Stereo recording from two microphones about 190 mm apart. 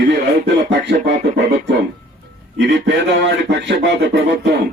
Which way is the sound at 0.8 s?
65° right (ahead or behind).